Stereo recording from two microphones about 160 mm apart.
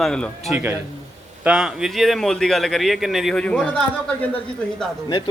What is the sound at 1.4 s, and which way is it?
A man's voice, 5° right (ahead or behind).